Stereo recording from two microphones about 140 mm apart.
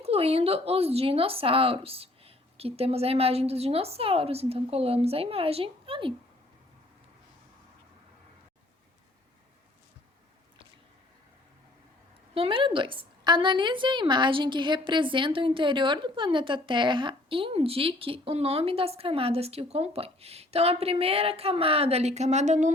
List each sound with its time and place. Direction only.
0.0 s speech: 45° right (ahead or behind)
12.3 s a woman's voice: 40° right (ahead or behind); by 22.7 s 60° right (ahead or behind)